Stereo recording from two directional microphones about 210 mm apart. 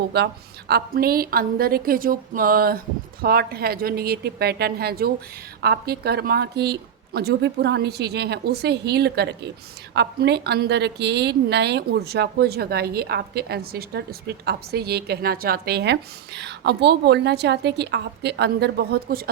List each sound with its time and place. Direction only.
0.1 s a woman's voice: 50° right (ahead or behind)